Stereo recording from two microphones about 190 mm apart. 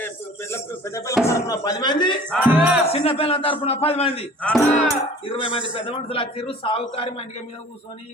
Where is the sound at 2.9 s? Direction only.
30° left (ahead or behind).